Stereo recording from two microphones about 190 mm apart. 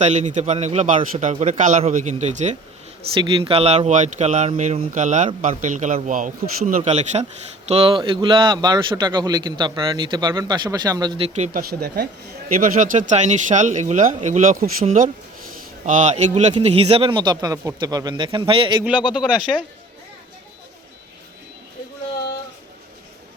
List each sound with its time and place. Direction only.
0.0 s a man's voice: 40° right (ahead or behind); by 11.3 s 25° right (ahead or behind)
11.3 s speech: 40° right (ahead or behind)
11.7 s speech: 55° right (ahead or behind)
12.5 s a man's voice: 45° right (ahead or behind); by 18.8 s 30° right (ahead or behind)
19.1 s speech: centre (ahead or behind)